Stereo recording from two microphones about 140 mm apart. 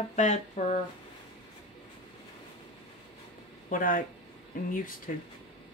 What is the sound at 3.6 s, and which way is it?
Speech, 75° left (ahead or behind).